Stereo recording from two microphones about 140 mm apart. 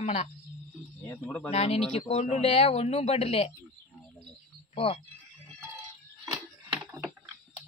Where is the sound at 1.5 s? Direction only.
50° left (ahead or behind).